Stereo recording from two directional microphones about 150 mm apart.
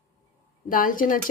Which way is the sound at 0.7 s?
65° left (ahead or behind).